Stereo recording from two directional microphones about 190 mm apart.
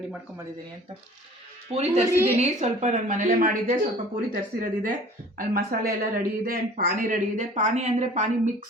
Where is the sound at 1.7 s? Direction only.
35° right (ahead or behind).